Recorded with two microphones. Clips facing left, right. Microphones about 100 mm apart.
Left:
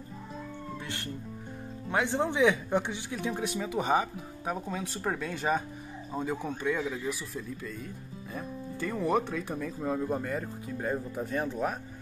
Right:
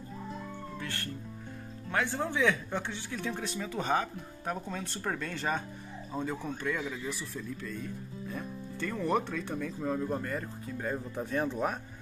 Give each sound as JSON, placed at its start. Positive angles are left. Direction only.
{"t": 0.8, "sound": "speech", "side_deg": 20}